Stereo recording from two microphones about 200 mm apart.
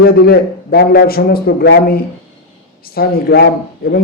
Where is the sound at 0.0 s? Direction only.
50° left (ahead or behind).